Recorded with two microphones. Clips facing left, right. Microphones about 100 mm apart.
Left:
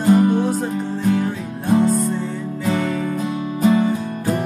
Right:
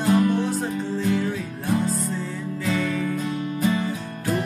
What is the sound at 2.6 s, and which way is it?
Music, 20° left (ahead or behind).